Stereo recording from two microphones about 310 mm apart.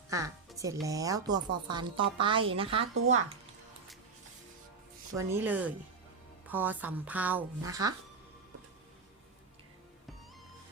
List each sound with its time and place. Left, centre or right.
0.1 s speech: centre
5.1 s speech: centre